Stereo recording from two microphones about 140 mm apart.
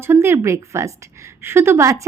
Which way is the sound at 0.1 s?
20° right (ahead or behind).